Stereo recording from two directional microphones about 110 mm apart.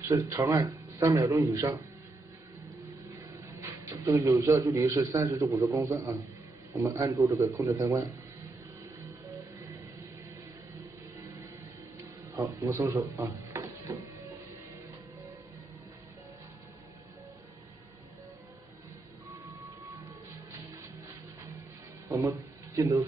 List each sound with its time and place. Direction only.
0.1 s a man's voice: 30° right (ahead or behind)
3.3 s a sound: 25° right (ahead or behind)
3.9 s a man's voice: 30° right (ahead or behind)
12.4 s speech: 30° right (ahead or behind)
22.1 s a man's voice: 25° right (ahead or behind)